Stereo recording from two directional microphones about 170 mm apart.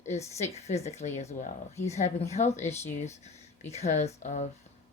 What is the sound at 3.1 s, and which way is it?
Speech, 40° left (ahead or behind).